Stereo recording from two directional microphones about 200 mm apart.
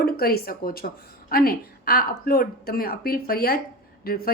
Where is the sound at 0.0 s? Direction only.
50° left (ahead or behind).